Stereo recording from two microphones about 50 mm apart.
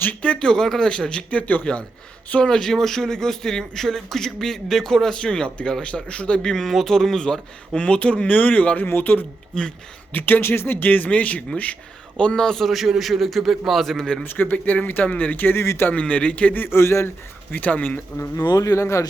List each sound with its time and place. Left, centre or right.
0.2 s a man's voice: centre
2.4 s a man's voice: centre
6.4 s a man's voice: centre
7.8 s a man's voice: left
8.9 s speech: left
9.5 s a man's voice: centre
10.1 s a man's voice: left
12.4 s a man's voice: centre
14.3 s speech: left
15.9 s a man's voice: left
16.6 s speech: left
17.5 s speech: left
18.3 s speech: left